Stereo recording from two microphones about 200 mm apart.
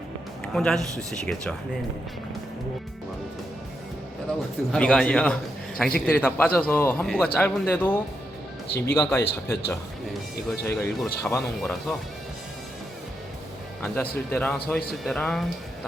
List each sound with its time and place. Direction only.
0.4 s a man's voice: 5° left (ahead or behind)
4.7 s a man's voice: 5° left (ahead or behind)
8.6 s speech: 55° left (ahead or behind)
9.0 s a man's voice: 10° left (ahead or behind)
10.7 s a man's voice: 10° left (ahead or behind)
13.8 s a man's voice: 10° left (ahead or behind)